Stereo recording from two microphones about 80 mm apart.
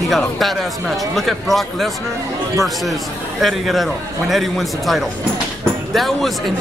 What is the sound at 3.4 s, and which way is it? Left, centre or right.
A man's voice, centre.